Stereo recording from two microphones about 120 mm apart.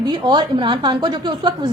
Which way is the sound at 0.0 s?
35° right (ahead or behind).